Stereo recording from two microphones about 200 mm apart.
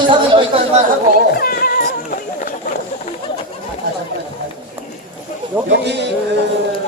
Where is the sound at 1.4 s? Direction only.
50° left (ahead or behind).